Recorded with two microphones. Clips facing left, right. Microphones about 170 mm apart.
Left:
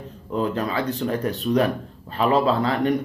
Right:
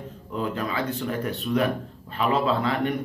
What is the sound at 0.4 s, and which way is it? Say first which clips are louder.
A man's voice: left 4 dB; 35° left (ahead or behind).